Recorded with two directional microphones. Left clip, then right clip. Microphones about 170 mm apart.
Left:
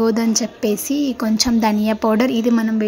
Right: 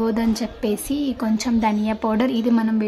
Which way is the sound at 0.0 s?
25° left (ahead or behind).